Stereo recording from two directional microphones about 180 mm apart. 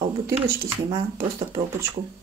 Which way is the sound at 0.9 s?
20° right (ahead or behind).